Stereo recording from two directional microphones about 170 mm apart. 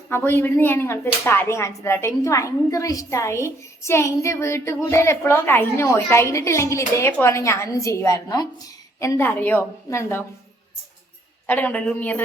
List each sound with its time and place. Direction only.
0.1 s speech: 15° left (ahead or behind)
11.4 s speech: 10° left (ahead or behind)